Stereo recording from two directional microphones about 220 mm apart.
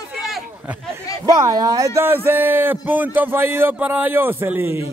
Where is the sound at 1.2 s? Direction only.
15° right (ahead or behind).